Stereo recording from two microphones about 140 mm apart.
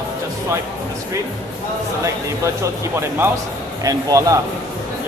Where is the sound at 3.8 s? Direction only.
25° right (ahead or behind).